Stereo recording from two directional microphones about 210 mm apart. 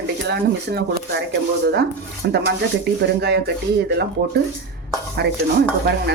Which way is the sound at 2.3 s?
55° right (ahead or behind).